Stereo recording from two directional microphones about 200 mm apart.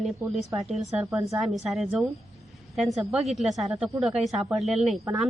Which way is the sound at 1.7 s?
5° right (ahead or behind).